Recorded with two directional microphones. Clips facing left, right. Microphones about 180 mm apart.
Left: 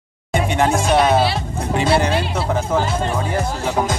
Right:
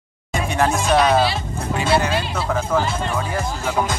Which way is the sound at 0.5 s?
25° left (ahead or behind).